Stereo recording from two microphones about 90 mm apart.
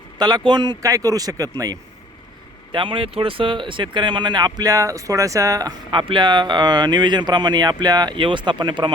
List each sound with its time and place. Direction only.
0.2 s speech: 50° right (ahead or behind)
2.7 s speech: 70° right (ahead or behind); by 4.7 s 50° right (ahead or behind)
4.7 s speech: 35° right (ahead or behind)
5.9 s speech: 65° right (ahead or behind)
8.1 s speech: 65° right (ahead or behind)